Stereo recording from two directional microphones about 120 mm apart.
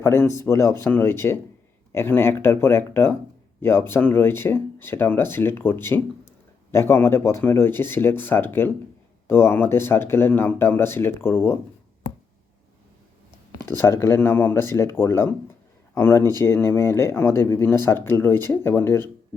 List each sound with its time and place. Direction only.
0.0 s speech: 20° left (ahead or behind)
13.6 s speech: 20° left (ahead or behind)